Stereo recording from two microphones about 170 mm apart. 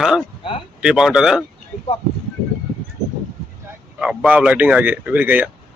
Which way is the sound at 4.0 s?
5° right (ahead or behind).